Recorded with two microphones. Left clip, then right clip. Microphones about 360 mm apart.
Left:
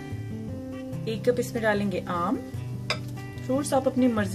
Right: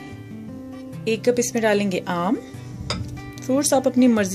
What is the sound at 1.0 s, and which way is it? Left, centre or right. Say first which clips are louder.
Speech: right 6 dB; right.